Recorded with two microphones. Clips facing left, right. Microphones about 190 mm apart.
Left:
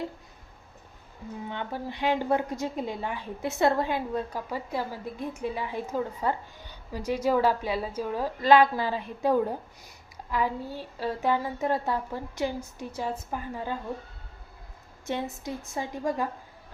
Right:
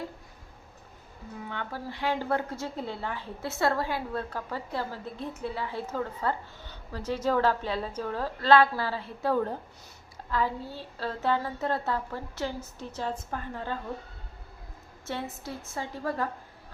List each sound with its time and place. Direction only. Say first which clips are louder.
1.5 s a woman's voice: left 2 dB; 20° left (ahead or behind)
15.0 s a woman's voice: left 4 dB; 15° left (ahead or behind)